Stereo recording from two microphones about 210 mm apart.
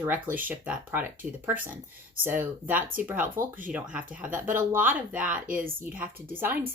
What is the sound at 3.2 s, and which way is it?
Speech, 40° right (ahead or behind).